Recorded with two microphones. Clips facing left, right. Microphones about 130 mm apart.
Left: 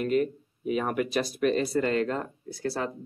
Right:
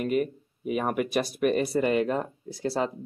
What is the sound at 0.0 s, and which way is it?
Speech, 5° right (ahead or behind).